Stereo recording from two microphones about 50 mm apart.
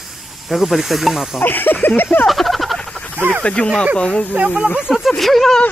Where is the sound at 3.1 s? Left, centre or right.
Right.